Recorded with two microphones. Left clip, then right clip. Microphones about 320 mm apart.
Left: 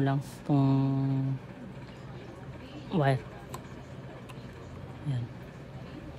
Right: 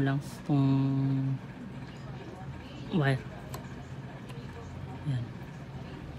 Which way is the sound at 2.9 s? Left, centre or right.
Left.